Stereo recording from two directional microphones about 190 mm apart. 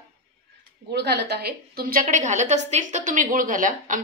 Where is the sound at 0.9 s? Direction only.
60° right (ahead or behind); by 4.0 s 45° right (ahead or behind).